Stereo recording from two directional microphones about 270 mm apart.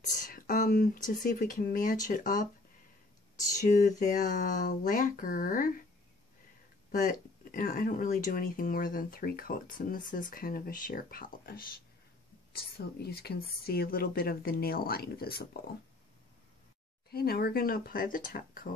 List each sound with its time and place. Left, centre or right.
0.0 s speech: left
6.9 s speech: left
12.7 s speech: left
17.1 s speech: left